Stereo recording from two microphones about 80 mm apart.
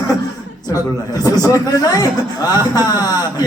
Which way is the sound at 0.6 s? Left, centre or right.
Left.